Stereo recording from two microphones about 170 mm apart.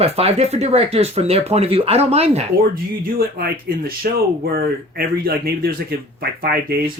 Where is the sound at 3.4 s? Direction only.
60° right (ahead or behind).